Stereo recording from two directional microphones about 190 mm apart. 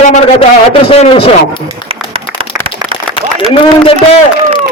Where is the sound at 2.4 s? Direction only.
30° right (ahead or behind).